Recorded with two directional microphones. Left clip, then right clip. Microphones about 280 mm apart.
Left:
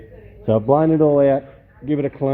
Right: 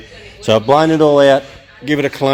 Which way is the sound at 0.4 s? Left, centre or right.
Centre.